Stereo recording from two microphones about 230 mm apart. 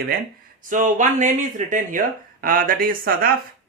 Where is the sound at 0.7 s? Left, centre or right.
Right.